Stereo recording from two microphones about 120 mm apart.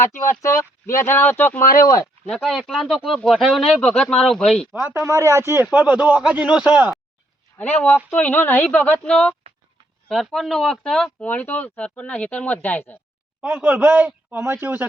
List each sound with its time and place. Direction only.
0.0 s speech: 20° left (ahead or behind)
2.3 s speech: centre (ahead or behind)
4.7 s a man's voice: 15° right (ahead or behind)
8.1 s speech: 10° left (ahead or behind)
13.4 s a man's voice: 15° right (ahead or behind)